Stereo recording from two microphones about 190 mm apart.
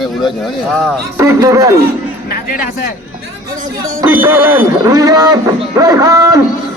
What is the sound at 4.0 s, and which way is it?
Speech, 10° right (ahead or behind).